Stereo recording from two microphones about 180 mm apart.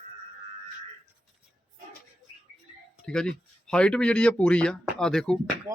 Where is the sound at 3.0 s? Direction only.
5° left (ahead or behind).